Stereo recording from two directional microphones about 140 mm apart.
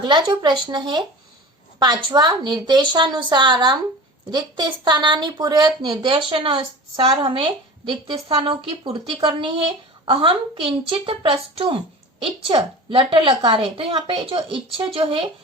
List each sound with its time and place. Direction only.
0.0 s speech: 35° right (ahead or behind)